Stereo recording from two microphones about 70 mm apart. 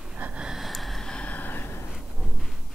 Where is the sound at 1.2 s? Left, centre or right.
Left.